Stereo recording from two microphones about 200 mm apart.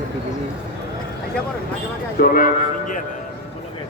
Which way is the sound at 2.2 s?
45° left (ahead or behind).